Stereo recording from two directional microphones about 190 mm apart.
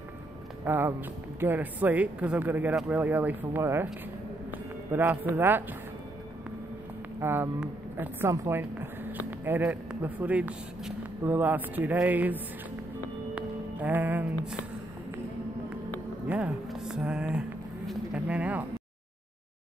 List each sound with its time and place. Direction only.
0.7 s speech: 10° right (ahead or behind)
7.2 s speech: 10° right (ahead or behind)
13.3 s music: 10° right (ahead or behind)
16.3 s speech: 5° right (ahead or behind)